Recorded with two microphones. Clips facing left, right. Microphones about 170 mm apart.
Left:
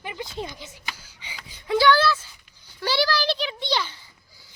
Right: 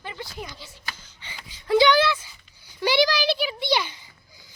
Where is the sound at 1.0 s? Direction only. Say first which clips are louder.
Left 1 dB; 10° left (ahead or behind).